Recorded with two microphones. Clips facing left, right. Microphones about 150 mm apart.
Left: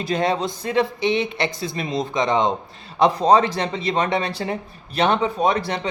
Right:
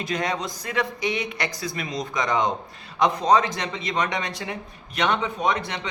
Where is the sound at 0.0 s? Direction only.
30° left (ahead or behind).